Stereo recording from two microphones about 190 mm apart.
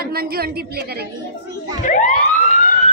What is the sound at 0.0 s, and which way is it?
Speech, 55° right (ahead or behind).